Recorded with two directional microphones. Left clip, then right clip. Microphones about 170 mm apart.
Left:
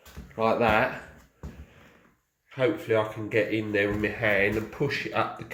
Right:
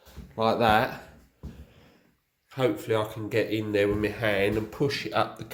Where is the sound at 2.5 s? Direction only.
25° right (ahead or behind).